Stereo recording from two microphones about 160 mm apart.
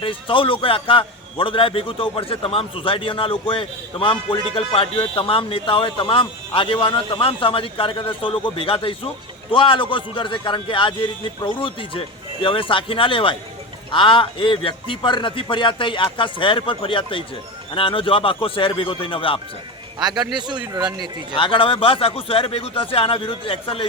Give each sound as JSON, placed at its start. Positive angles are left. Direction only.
{"t": 0.0, "sound": "a man's voice", "side_deg": 35}
{"t": 20.0, "sound": "a man's voice", "side_deg": -25}
{"t": 21.3, "sound": "a man's voice", "side_deg": 35}